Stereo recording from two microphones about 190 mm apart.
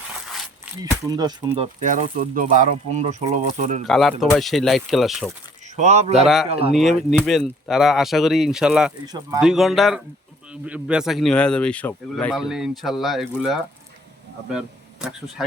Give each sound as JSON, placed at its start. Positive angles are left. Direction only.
{"t": 0.3, "sound": "a sound", "side_deg": 0}
{"t": 1.0, "sound": "speech", "side_deg": -20}
{"t": 1.5, "sound": "speech", "side_deg": -40}
{"t": 3.8, "sound": "speech", "side_deg": 0}
{"t": 5.7, "sound": "speech", "side_deg": -35}
{"t": 6.2, "sound": "speech", "side_deg": 0}